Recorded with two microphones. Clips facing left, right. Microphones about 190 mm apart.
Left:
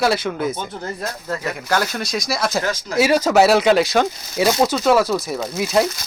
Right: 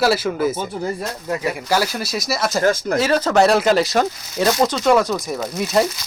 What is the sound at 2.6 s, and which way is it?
Speech, 50° right (ahead or behind).